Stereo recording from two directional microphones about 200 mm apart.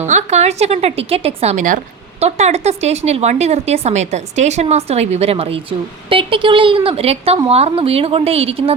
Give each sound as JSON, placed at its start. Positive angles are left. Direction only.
{"t": 0.0, "sound": "a woman's voice", "side_deg": -35}